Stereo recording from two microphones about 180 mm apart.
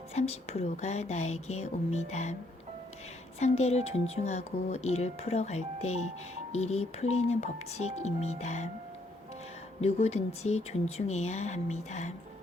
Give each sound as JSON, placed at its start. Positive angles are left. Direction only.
{"t": 0.1, "sound": "speech", "side_deg": 35}
{"t": 3.4, "sound": "speech", "side_deg": 35}
{"t": 9.8, "sound": "speech", "side_deg": 35}